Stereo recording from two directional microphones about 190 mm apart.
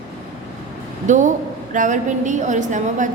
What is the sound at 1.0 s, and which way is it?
A woman's voice, 40° right (ahead or behind).